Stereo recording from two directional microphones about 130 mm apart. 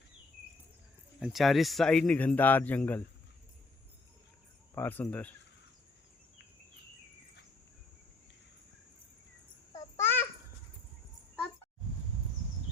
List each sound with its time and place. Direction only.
1.2 s speech: centre (ahead or behind)
4.7 s speech: 15° left (ahead or behind)
9.7 s babbling: 15° left (ahead or behind)